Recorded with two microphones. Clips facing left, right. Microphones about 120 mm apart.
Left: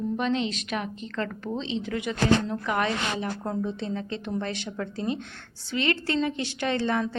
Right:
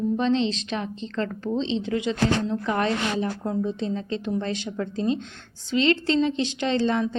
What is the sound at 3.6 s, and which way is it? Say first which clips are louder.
A woman's voice: right 3 dB; 20° right (ahead or behind).